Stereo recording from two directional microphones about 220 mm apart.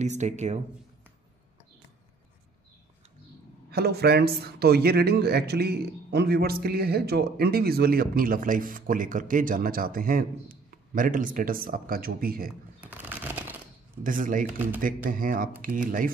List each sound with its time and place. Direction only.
0.0 s speech: 30° right (ahead or behind)
3.7 s speech: 45° right (ahead or behind)
12.8 s a sound: 10° right (ahead or behind)
14.0 s speech: 35° right (ahead or behind)